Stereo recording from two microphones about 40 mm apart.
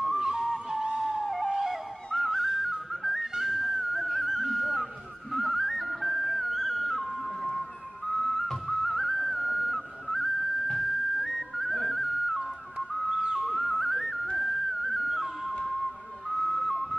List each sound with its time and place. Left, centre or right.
0.0 s a sound: centre
1.2 s music: centre
2.9 s whistling: centre
5.3 s music: centre
8.1 s whistling: centre
8.6 s whistle: centre
10.8 s music: centre
13.2 s music: centre
13.5 s music: centre
16.3 s whistle: centre